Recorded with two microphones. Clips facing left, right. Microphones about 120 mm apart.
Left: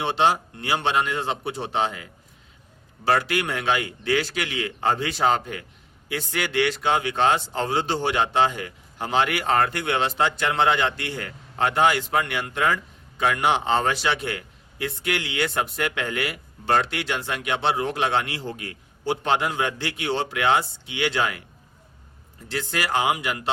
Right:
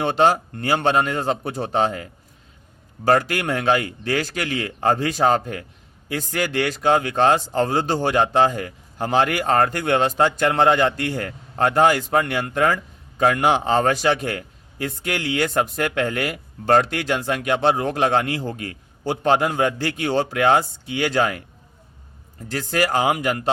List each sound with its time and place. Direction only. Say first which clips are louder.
0.0 s a man's voice: right 4 dB; 45° right (ahead or behind)
22.4 s a man's voice: right 5 dB; 45° right (ahead or behind)